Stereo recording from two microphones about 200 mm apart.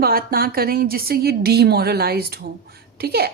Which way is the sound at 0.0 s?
50° right (ahead or behind).